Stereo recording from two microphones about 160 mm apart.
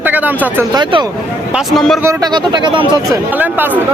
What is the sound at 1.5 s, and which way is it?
Speech, centre (ahead or behind).